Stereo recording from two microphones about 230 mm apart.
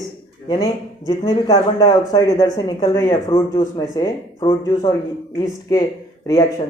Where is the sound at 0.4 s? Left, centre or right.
Centre.